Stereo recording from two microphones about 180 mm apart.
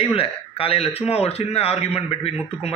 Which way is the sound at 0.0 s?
30° left (ahead or behind).